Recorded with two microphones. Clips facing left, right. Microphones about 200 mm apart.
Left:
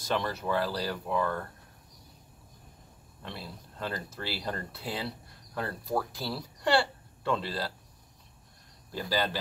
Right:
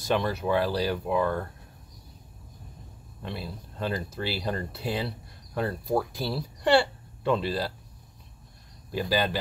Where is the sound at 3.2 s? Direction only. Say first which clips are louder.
Right 6 dB; 15° right (ahead or behind).